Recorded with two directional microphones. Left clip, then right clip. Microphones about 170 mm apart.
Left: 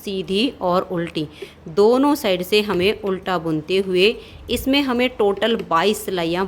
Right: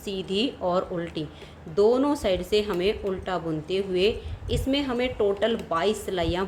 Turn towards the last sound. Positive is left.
turn(degrees=35)  # may be behind; listen again after turning